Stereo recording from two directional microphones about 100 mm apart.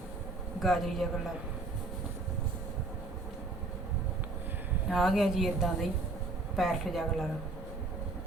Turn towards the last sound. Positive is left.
turn(degrees=0)  # may be behind; listen again after turning